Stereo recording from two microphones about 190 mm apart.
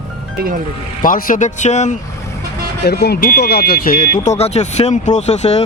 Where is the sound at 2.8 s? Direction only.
60° left (ahead or behind).